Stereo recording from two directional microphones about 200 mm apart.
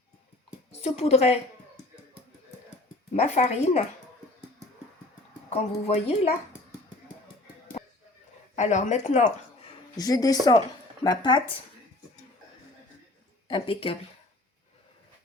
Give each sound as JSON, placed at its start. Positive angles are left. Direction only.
{"t": 0.7, "sound": "a woman's voice", "side_deg": 30}
{"t": 3.2, "sound": "speech", "side_deg": 35}
{"t": 5.5, "sound": "speech", "side_deg": 35}
{"t": 8.5, "sound": "speech", "side_deg": 35}
{"t": 10.0, "sound": "speech", "side_deg": 20}
{"t": 13.5, "sound": "speech", "side_deg": 25}